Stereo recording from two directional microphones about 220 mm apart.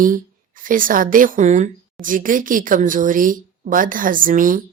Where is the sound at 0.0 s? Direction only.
40° right (ahead or behind).